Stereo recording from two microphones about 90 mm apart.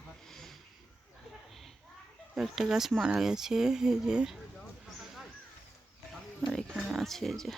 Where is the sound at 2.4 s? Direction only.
5° right (ahead or behind).